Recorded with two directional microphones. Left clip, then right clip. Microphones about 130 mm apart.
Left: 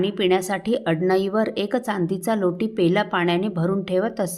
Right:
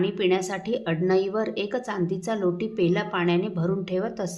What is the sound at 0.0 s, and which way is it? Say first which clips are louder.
A woman's voice: left 3 dB; 40° left (ahead or behind).